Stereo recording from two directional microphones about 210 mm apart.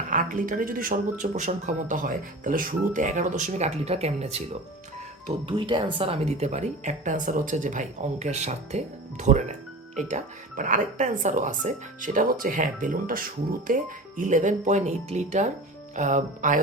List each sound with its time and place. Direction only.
0.1 s speech: 40° right (ahead or behind)
5.5 s speech: 20° right (ahead or behind)
10.6 s speech: 40° right (ahead or behind)